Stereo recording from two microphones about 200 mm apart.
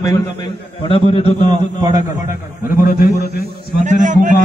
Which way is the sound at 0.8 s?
25° left (ahead or behind).